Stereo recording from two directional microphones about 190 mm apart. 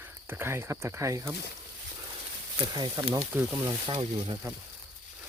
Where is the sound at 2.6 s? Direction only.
25° right (ahead or behind).